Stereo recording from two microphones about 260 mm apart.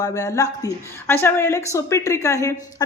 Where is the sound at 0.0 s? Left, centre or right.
Centre.